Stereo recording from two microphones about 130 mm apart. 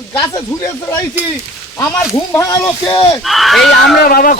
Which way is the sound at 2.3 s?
20° left (ahead or behind).